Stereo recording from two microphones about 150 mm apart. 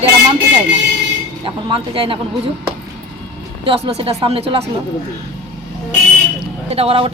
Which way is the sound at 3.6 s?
40° right (ahead or behind).